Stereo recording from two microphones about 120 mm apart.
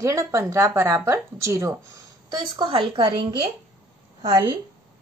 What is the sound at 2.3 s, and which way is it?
A woman's voice, 40° right (ahead or behind).